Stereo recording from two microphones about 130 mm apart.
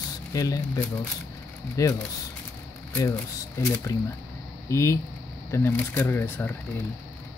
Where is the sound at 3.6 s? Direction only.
20° left (ahead or behind).